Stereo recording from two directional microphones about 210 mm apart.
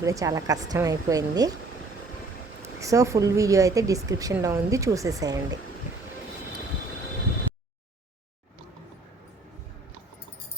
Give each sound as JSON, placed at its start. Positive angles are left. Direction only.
{"t": 0.0, "sound": "a woman's voice", "side_deg": -15}
{"t": 2.6, "sound": "a woman's voice", "side_deg": -15}